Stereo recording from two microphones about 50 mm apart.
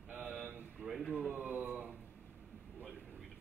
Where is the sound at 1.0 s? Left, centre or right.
Centre.